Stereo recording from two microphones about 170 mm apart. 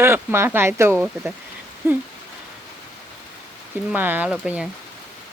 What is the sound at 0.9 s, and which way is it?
Speech, centre (ahead or behind).